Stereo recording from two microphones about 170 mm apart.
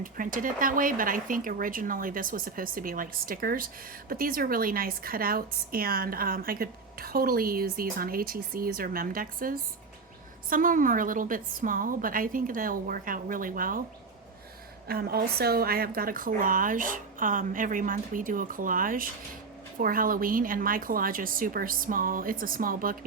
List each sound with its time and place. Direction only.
0.0 s a woman's voice: 55° right (ahead or behind)
14.8 s a woman's voice: 65° right (ahead or behind)